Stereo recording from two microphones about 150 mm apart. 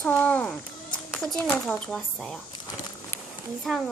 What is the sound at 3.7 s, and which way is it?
Speech, 5° left (ahead or behind).